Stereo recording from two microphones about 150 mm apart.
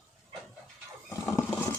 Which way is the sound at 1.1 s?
15° left (ahead or behind).